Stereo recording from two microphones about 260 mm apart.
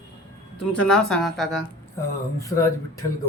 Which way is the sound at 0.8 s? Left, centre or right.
Centre.